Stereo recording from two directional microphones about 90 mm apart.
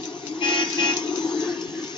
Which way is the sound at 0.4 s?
60° left (ahead or behind).